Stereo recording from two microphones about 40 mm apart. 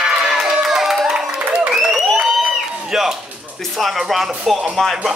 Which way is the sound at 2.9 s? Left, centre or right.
Centre.